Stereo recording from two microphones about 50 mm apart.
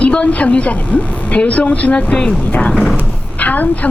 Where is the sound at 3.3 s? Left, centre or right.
Left.